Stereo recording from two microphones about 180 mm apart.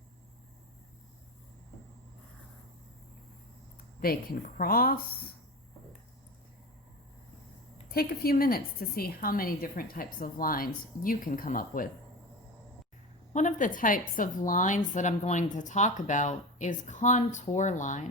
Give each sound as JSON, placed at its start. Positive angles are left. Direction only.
{"t": 3.8, "sound": "speech", "side_deg": 55}
{"t": 7.9, "sound": "a woman's voice", "side_deg": 55}
{"t": 13.3, "sound": "a woman's voice", "side_deg": 45}